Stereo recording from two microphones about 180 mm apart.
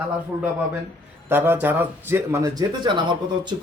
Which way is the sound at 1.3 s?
10° right (ahead or behind).